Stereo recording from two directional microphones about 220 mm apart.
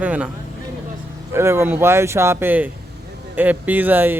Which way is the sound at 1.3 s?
10° right (ahead or behind).